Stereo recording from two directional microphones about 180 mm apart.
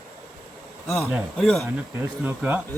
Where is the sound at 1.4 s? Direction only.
Centre (ahead or behind).